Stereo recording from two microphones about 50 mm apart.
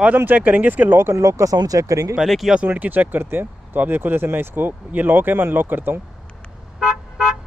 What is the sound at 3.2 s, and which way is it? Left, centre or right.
Speech, right.